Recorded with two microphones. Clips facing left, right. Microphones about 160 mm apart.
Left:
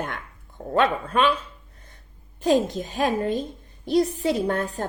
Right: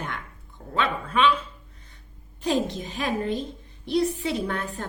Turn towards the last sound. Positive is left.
turn(degrees=45)  # may be behind; listen again after turning